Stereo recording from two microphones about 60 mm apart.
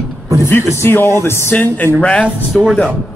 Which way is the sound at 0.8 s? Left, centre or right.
Left.